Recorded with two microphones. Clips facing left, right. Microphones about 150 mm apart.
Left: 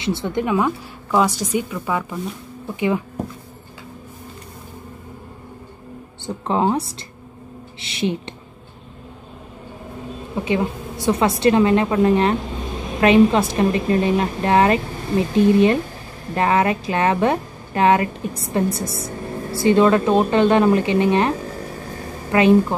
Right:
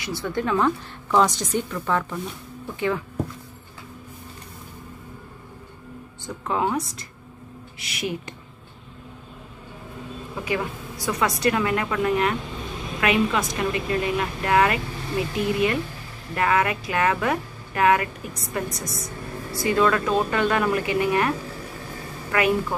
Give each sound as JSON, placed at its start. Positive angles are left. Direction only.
{"t": 0.0, "sound": "a woman's voice", "side_deg": 20}
{"t": 6.2, "sound": "a woman's voice", "side_deg": 30}
{"t": 10.3, "sound": "a woman's voice", "side_deg": 25}